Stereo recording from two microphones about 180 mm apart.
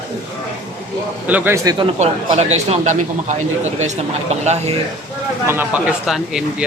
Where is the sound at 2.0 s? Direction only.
35° right (ahead or behind).